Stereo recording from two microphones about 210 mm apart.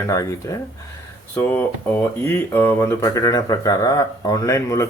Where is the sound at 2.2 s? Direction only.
10° left (ahead or behind).